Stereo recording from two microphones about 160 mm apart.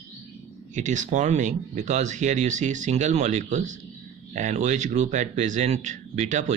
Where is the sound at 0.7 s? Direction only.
50° right (ahead or behind).